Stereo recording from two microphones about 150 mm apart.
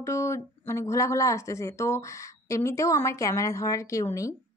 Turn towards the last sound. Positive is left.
turn(degrees=20)  # may be behind; listen again after turning